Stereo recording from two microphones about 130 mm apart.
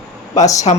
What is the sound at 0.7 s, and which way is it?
Speech, 50° left (ahead or behind).